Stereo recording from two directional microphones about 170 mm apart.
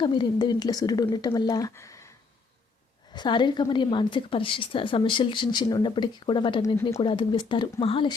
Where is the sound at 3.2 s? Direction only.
25° left (ahead or behind).